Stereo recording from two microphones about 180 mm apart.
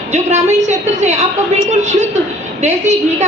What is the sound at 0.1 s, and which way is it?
A woman's voice, 40° right (ahead or behind).